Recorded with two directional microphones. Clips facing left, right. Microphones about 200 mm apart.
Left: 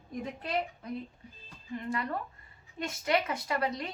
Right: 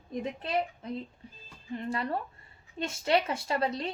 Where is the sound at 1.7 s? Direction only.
30° right (ahead or behind).